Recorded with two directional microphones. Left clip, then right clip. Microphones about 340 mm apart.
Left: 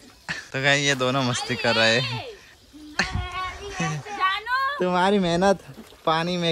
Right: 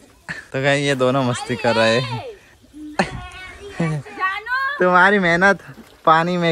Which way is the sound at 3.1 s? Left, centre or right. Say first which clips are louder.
Left 4 dB; left.